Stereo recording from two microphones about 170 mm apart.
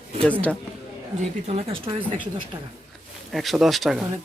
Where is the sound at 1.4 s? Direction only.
35° right (ahead or behind).